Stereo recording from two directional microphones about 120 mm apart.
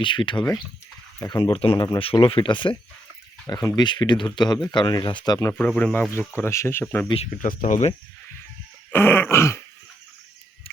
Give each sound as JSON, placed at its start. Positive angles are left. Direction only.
{"t": 0.0, "sound": "speech", "side_deg": 40}
{"t": 1.7, "sound": "speech", "side_deg": 25}
{"t": 2.0, "sound": "speech", "side_deg": 50}
{"t": 3.5, "sound": "speech", "side_deg": 30}
{"t": 5.5, "sound": "speech", "side_deg": 10}
{"t": 7.3, "sound": "speech", "side_deg": 90}
{"t": 8.9, "sound": "speech", "side_deg": 20}